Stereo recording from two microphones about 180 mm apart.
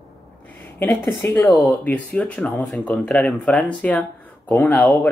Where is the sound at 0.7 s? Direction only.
15° left (ahead or behind).